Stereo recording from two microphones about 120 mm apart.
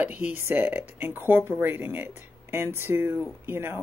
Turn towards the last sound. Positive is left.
turn(degrees=-20)  # may be behind; listen again after turning